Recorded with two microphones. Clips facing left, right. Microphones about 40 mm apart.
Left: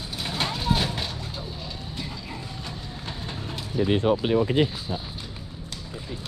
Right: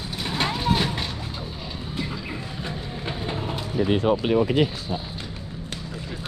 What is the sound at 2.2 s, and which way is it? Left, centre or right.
Vehicle, right.